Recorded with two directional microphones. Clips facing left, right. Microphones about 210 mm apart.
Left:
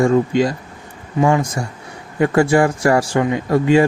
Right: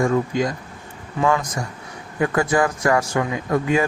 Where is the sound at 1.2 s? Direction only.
30° left (ahead or behind).